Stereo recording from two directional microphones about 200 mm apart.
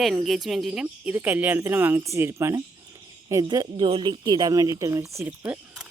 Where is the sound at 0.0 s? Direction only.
Centre (ahead or behind).